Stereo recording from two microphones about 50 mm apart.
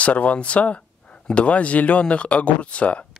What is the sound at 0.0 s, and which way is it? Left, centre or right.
Speech, left.